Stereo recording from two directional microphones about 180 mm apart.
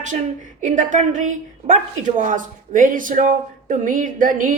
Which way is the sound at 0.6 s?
45° right (ahead or behind).